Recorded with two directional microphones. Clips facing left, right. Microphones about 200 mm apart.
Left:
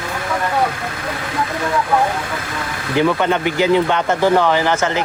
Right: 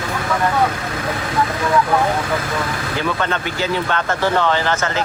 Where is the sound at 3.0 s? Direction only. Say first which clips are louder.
Left 7 dB; 15° left (ahead or behind).